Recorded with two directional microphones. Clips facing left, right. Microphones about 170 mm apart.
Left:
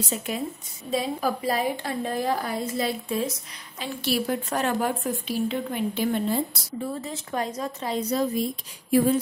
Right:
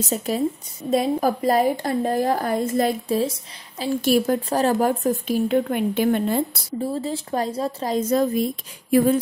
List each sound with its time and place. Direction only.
0.0 s speech: 40° right (ahead or behind)
3.8 s speech: 45° right (ahead or behind)
4.5 s speech: 35° right (ahead or behind); by 6.4 s 55° right (ahead or behind)
6.8 s speech: 30° right (ahead or behind); by 9.2 s 55° right (ahead or behind)